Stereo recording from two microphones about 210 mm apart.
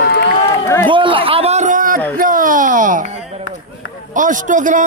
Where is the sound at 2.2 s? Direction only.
40° right (ahead or behind).